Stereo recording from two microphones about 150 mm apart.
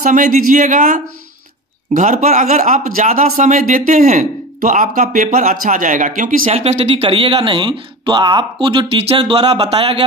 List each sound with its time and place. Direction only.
0.0 s speech: 65° right (ahead or behind); by 9.8 s 35° right (ahead or behind)